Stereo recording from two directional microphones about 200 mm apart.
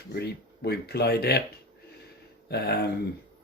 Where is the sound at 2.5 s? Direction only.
55° left (ahead or behind).